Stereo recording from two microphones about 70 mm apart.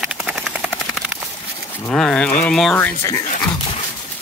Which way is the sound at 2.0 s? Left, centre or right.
Centre.